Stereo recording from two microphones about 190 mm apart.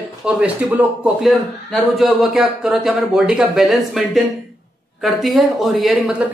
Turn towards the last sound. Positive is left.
turn(degrees=0)  # may be behind; listen again after turning